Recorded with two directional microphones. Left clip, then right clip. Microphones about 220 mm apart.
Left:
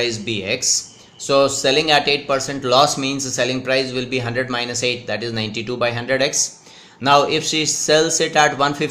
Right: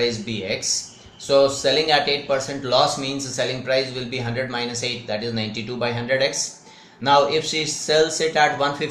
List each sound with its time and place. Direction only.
0.0 s speech: 45° left (ahead or behind)